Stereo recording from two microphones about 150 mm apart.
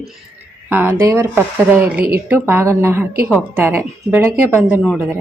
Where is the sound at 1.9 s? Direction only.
80° right.